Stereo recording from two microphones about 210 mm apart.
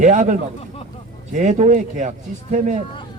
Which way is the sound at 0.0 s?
35° right (ahead or behind).